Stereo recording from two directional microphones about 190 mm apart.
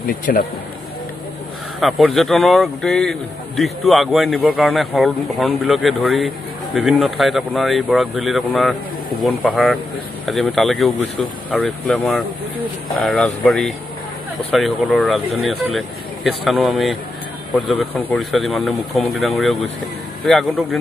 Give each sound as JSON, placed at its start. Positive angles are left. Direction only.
{"t": 0.0, "sound": "speech", "side_deg": 55}
{"t": 1.8, "sound": "a man's voice", "side_deg": 0}
{"t": 17.9, "sound": "a man's voice", "side_deg": 5}